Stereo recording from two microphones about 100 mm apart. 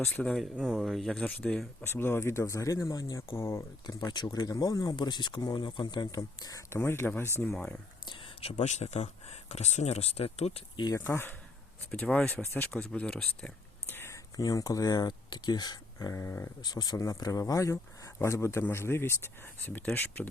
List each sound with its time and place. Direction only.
0.0 s speech: 10° left (ahead or behind)
0.5 s speech: 5° right (ahead or behind)
1.8 s speech: 20° left (ahead or behind)
3.3 s speech: 25° left (ahead or behind)
3.8 s speech: 45° left (ahead or behind)
6.7 s speech: 20° left (ahead or behind)
7.4 s speech: 10° left (ahead or behind)
8.4 s speech: 85° left
10.9 s speech: 25° left (ahead or behind)
13.9 s speech: 25° left (ahead or behind)
16.1 s speech: 25° left (ahead or behind)
16.6 s speech: 40° left (ahead or behind); by 20.2 s 20° left (ahead or behind)